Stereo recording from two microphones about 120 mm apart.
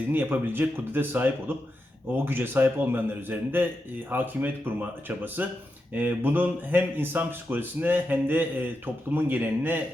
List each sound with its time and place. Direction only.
0.1 s speech: 15° right (ahead or behind)